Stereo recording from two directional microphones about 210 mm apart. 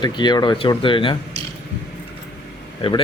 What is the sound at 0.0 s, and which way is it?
Speech, 20° left (ahead or behind).